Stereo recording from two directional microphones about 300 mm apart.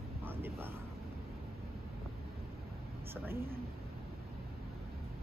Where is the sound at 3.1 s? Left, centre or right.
Centre.